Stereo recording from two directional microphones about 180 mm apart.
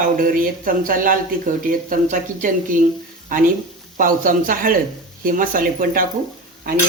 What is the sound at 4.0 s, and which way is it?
Speech, 50° right (ahead or behind).